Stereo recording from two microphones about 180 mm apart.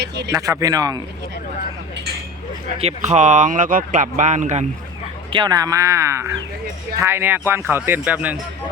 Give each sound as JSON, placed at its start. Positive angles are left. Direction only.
{"t": 0.3, "sound": "speech", "side_deg": -15}
{"t": 2.7, "sound": "speech", "side_deg": -35}
{"t": 5.3, "sound": "a man's voice", "side_deg": -25}